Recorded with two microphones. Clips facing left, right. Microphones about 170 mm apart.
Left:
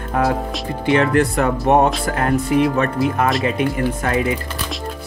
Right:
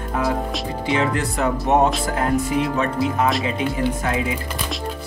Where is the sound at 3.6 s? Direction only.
60° left (ahead or behind).